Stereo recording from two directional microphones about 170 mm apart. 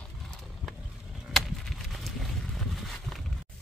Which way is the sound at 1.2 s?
Centre (ahead or behind).